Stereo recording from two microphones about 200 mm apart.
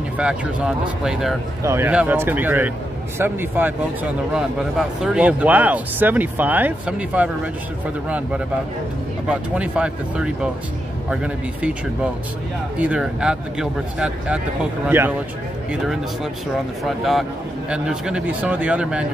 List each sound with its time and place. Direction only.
0.2 s speech: 5° right (ahead or behind)
9.3 s speech: 5° right (ahead or behind)
12.7 s speech: 5° right (ahead or behind)